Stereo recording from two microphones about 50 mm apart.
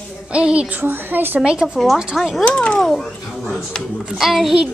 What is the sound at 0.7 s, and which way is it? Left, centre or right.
Speech, right.